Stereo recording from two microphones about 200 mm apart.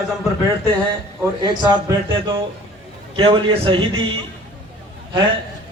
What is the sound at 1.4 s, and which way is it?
A man's voice, 20° right (ahead or behind).